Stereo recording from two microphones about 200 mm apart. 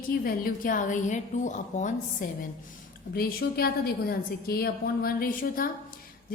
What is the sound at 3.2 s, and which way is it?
A woman's voice, 50° left (ahead or behind).